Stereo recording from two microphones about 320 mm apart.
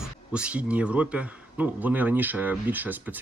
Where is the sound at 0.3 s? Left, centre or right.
Centre.